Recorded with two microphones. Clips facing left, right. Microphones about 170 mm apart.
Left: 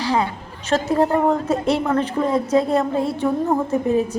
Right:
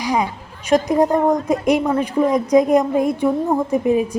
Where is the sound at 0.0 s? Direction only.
15° right (ahead or behind).